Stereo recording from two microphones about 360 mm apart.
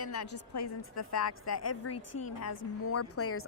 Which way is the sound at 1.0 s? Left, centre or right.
Left.